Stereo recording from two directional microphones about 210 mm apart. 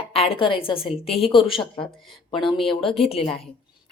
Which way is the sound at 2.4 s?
25° left (ahead or behind).